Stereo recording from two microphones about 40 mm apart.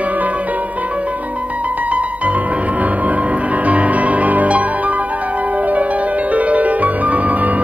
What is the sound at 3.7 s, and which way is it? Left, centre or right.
Music, right.